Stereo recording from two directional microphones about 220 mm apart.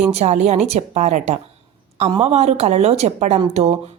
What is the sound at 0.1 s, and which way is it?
A woman's voice, 30° right (ahead or behind).